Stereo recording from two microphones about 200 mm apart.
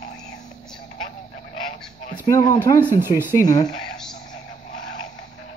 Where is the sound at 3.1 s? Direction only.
10° right (ahead or behind).